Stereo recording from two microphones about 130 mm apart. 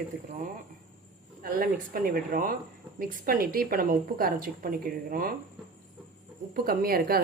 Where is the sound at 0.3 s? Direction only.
70° right (ahead or behind).